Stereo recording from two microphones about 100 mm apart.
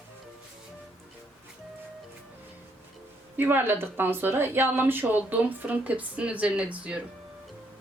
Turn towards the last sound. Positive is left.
turn(degrees=-10)  # may be behind; listen again after turning